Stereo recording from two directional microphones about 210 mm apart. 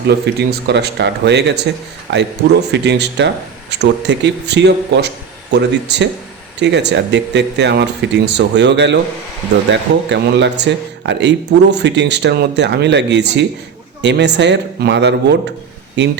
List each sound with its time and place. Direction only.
0.1 s speech: 50° right (ahead or behind)